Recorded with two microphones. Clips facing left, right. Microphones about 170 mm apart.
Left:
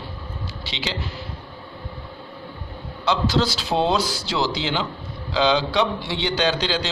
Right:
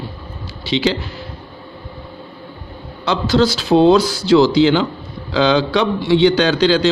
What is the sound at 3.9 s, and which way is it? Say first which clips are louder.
A man's voice: right 11 dB; 65° right (ahead or behind).